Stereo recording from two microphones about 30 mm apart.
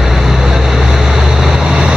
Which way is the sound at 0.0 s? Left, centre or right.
Centre.